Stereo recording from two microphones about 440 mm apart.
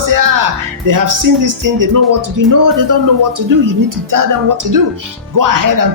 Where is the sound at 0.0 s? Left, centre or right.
Right.